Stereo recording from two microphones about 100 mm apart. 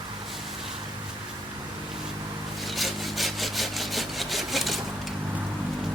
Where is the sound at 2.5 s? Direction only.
Centre (ahead or behind).